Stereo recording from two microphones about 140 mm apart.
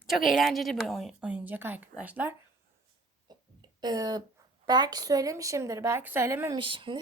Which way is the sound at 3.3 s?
30° right (ahead or behind).